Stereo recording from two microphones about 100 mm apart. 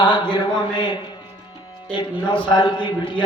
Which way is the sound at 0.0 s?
50° left (ahead or behind).